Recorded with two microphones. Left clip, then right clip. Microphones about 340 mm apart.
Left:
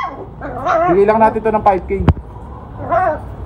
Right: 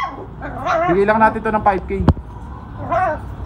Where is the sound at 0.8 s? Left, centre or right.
Centre.